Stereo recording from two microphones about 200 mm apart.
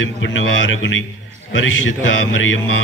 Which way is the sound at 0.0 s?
70° left (ahead or behind).